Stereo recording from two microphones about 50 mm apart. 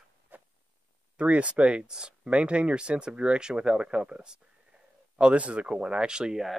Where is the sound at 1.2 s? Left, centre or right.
Right.